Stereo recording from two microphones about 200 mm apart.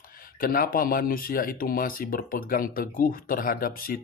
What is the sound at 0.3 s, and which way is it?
Speech, 45° left (ahead or behind).